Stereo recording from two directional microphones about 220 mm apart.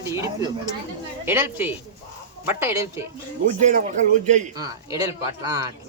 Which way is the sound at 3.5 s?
35° right (ahead or behind).